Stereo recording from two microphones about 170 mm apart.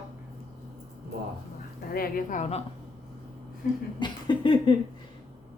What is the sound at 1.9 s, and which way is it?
Speech, 55° left (ahead or behind).